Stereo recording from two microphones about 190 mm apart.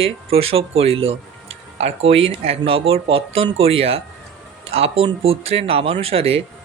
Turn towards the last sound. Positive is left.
turn(degrees=-30)  # may be behind; listen again after turning